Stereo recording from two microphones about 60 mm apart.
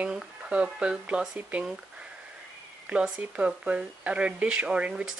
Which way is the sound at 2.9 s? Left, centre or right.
Right.